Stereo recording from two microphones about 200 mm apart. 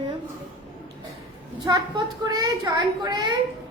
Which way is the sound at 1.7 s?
20° right (ahead or behind).